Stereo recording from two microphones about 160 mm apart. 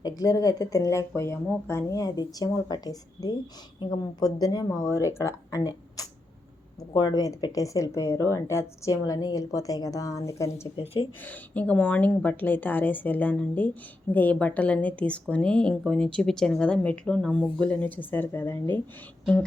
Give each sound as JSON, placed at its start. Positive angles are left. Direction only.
{"t": 0.0, "sound": "speech", "side_deg": 25}
{"t": 10.8, "sound": "speech", "side_deg": 35}
{"t": 11.2, "sound": "a woman's voice", "side_deg": 10}